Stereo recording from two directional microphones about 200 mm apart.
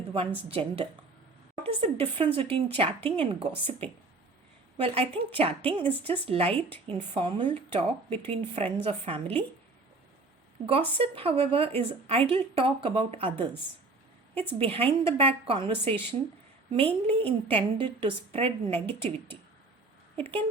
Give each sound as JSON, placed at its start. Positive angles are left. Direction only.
{"t": 0.4, "sound": "speech", "side_deg": -30}
{"t": 10.7, "sound": "speech", "side_deg": -30}